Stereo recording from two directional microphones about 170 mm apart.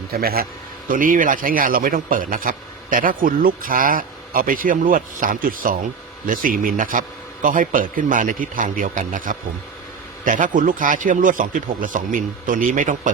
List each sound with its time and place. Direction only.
0.1 s a man's voice: 60° right (ahead or behind)